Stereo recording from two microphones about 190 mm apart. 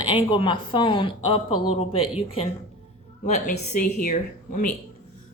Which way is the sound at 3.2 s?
40° left (ahead or behind).